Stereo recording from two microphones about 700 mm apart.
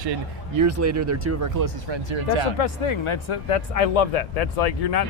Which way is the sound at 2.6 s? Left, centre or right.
Left.